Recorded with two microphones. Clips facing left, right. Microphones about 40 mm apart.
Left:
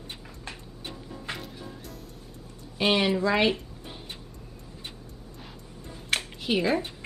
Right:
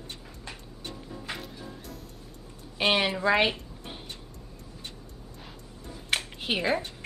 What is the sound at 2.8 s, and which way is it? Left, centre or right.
Speech, centre.